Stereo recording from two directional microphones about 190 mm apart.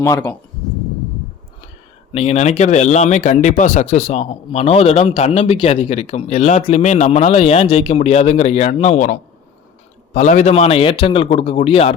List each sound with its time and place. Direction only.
0.0 s speech: 15° left (ahead or behind)
2.1 s speech: 35° left (ahead or behind)
10.2 s speech: 40° left (ahead or behind)